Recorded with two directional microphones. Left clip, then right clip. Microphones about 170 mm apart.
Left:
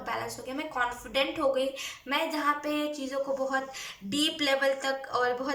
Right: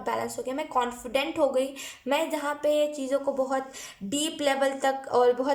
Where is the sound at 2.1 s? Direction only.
45° right (ahead or behind).